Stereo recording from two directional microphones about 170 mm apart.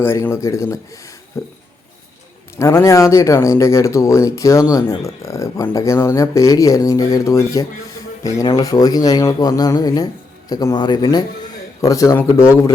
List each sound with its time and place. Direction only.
0.0 s speech: 15° left (ahead or behind)
2.6 s speech: 20° left (ahead or behind)